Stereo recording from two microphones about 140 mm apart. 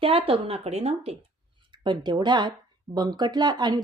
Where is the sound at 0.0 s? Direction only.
40° right (ahead or behind).